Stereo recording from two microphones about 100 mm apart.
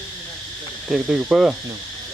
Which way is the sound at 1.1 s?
5° right (ahead or behind).